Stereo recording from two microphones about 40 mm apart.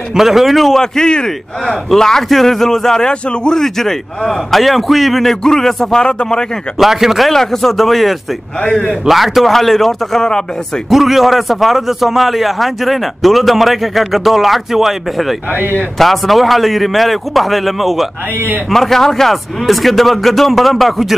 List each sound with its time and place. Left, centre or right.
0.1 s a man's voice: centre
0.7 s a man's voice: centre
5.9 s speech: centre
6.8 s speech: centre
7.2 s a man's voice: centre
10.9 s a man's voice: centre